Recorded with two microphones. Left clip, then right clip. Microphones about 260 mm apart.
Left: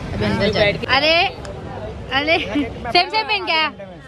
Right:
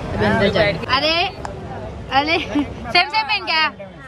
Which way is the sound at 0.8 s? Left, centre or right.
Centre.